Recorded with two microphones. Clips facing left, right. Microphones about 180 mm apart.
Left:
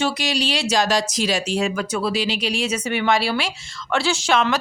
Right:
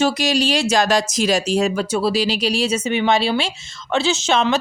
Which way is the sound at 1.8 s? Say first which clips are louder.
Right 4 dB; 30° right (ahead or behind).